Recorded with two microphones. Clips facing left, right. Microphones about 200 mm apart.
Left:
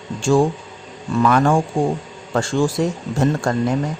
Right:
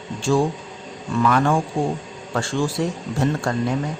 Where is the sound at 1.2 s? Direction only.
40° left (ahead or behind).